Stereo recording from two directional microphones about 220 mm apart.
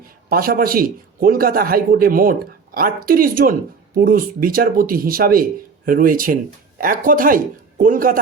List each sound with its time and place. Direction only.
0.0 s speech: 40° right (ahead or behind)